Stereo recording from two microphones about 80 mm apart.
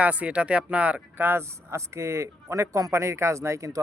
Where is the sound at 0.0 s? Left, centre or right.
Centre.